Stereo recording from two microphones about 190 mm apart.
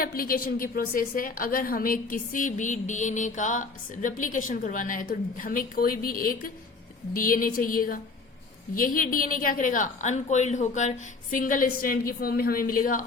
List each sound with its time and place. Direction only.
0.0 s a woman's voice: 50° left (ahead or behind)